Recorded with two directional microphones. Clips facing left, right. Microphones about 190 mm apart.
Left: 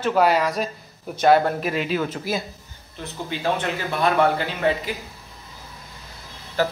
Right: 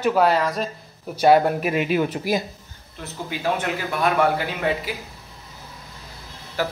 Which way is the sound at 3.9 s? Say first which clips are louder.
Left 1 dB; 10° right (ahead or behind).